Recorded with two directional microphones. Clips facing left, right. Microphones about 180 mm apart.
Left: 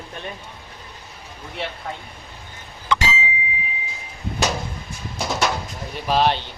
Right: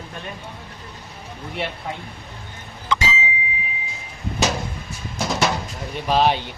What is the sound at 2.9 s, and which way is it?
Bicycle bell, 65° left (ahead or behind).